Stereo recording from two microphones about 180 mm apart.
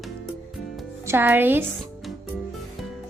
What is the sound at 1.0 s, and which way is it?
Speech, 15° right (ahead or behind).